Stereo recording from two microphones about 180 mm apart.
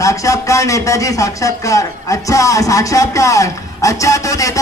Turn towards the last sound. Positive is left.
turn(degrees=20)  # may be behind; listen again after turning